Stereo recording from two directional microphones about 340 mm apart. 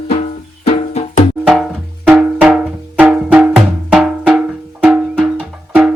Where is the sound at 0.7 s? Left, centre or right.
Centre.